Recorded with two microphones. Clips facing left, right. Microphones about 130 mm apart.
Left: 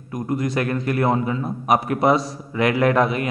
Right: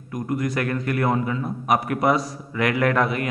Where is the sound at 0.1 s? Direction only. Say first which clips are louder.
Left 2 dB; 25° left (ahead or behind).